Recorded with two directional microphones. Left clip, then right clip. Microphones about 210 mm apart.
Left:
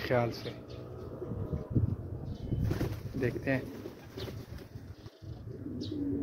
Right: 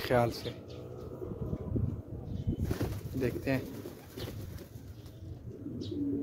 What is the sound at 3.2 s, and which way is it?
Speech, 15° right (ahead or behind).